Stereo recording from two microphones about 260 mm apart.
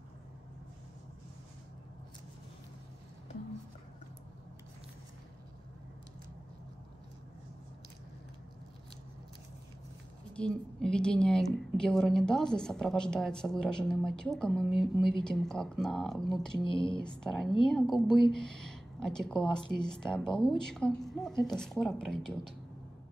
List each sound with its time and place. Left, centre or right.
10.3 s a woman's voice: centre
16.5 s speech: centre
17.0 s a woman's voice: centre